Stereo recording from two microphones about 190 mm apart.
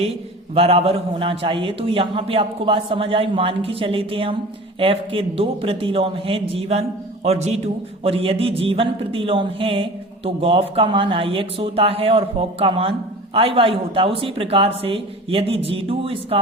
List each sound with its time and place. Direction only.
0.0 s a man's voice: 30° right (ahead or behind)